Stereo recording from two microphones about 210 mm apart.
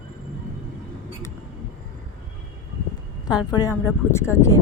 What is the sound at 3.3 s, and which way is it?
A woman's voice, 20° left (ahead or behind).